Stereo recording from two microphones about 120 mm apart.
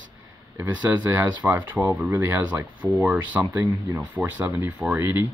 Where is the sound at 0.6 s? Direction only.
15° right (ahead or behind).